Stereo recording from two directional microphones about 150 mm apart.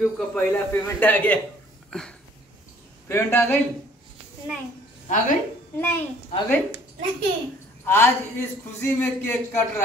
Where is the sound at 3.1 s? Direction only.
15° left (ahead or behind).